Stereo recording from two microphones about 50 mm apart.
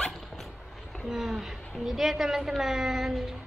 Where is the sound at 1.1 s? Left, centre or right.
Centre.